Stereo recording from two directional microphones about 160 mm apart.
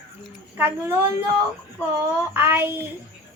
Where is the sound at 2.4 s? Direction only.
15° right (ahead or behind).